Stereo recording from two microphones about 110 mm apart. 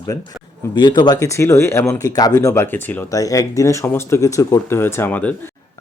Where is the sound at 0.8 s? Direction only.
40° left (ahead or behind); by 3.0 s 15° left (ahead or behind).